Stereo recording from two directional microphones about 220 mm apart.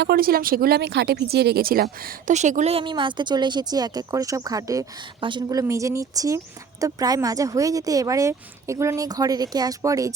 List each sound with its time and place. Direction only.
0.0 s speech: 45° right (ahead or behind); by 10.1 s 15° right (ahead or behind)